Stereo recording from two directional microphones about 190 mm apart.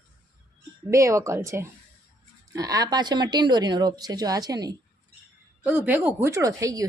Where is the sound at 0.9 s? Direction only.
15° right (ahead or behind).